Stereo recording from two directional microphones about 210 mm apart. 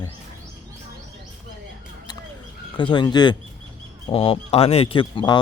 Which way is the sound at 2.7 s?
20° left (ahead or behind).